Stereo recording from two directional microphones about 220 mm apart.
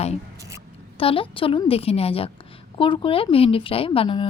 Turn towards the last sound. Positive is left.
turn(degrees=25)  # may be behind; listen again after turning